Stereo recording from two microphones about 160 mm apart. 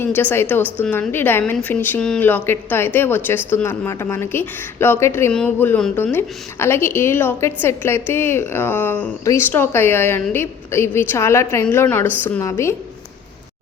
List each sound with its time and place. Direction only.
0.0 s a woman's voice: 10° left (ahead or behind)